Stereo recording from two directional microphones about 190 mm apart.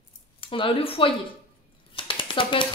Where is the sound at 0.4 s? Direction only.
25° left (ahead or behind).